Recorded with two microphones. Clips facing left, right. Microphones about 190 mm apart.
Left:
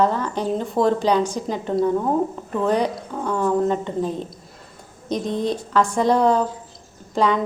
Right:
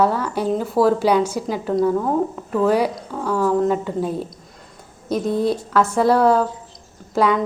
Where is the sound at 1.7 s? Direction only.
5° left (ahead or behind).